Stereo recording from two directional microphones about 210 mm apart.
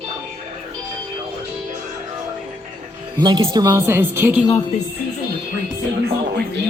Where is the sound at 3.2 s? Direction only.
20° right (ahead or behind).